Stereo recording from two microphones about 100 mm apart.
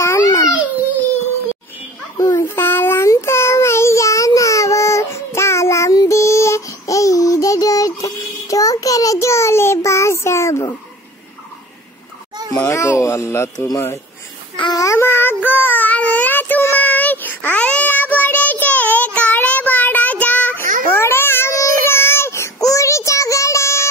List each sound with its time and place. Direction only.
0.0 s babbling: 30° left (ahead or behind)
2.1 s child singing: 30° left (ahead or behind)
12.6 s a sound: 30° left (ahead or behind)
14.8 s child singing: 30° left (ahead or behind)